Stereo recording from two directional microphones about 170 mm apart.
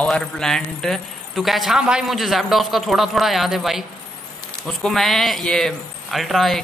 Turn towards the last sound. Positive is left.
turn(degrees=0)  # may be behind; listen again after turning